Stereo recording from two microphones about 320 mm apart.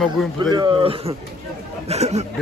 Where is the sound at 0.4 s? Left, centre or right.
Centre.